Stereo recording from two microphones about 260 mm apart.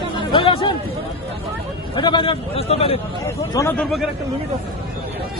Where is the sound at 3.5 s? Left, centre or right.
Centre.